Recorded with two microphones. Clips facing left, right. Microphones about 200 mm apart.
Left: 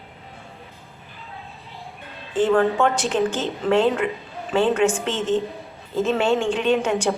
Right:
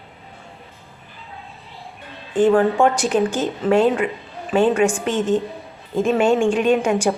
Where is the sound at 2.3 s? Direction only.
15° right (ahead or behind).